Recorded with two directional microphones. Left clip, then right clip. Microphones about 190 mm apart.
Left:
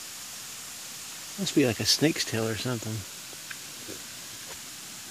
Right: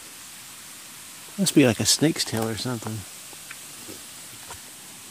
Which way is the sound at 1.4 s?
40° right (ahead or behind).